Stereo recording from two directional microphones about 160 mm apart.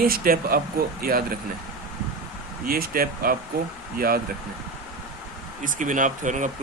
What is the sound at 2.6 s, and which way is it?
Speech, 65° right (ahead or behind).